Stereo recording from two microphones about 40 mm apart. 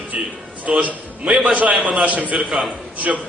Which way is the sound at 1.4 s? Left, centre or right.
Right.